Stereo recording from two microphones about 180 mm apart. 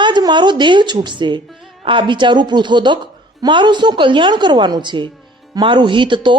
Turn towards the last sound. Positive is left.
turn(degrees=-25)  # may be behind; listen again after turning